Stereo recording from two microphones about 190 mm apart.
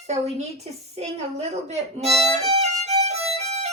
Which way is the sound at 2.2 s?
35° right (ahead or behind).